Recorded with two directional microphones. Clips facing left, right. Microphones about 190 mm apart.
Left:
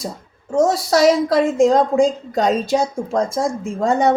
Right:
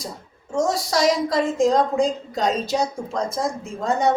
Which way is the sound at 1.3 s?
55° left (ahead or behind).